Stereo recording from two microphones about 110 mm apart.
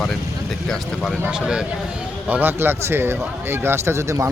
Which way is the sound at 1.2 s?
10° right (ahead or behind).